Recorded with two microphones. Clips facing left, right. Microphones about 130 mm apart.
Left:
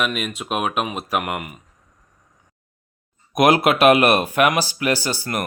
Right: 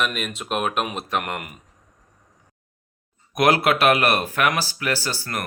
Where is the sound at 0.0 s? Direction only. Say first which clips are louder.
Left 2 dB; 5° left (ahead or behind).